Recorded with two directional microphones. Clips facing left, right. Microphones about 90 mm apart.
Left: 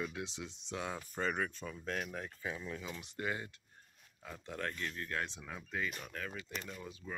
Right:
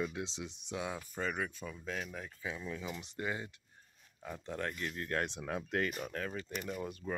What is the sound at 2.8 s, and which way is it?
Speech, 20° right (ahead or behind).